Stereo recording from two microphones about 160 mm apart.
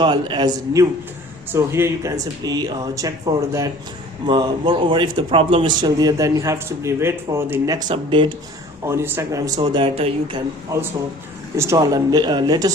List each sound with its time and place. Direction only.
0.0 s a man's voice: 30° right (ahead or behind)
7.9 s speech: 30° right (ahead or behind)
8.8 s speech: 15° right (ahead or behind)
9.6 s a man's voice: 30° right (ahead or behind)
10.7 s a man's voice: 20° right (ahead or behind)